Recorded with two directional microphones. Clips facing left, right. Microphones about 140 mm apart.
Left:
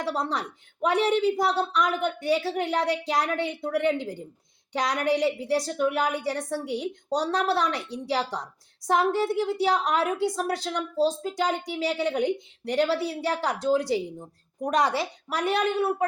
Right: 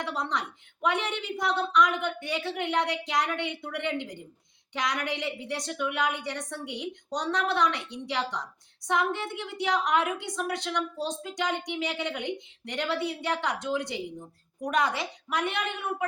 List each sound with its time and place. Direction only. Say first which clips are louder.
0.0 s a woman's voice: left 3 dB; 35° left (ahead or behind)